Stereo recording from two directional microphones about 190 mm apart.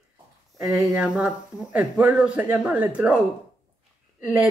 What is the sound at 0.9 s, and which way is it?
Speech, 5° right (ahead or behind).